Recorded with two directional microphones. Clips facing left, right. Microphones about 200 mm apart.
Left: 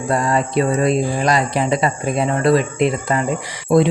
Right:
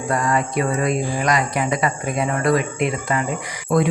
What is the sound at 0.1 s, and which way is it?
Speech, 30° left (ahead or behind).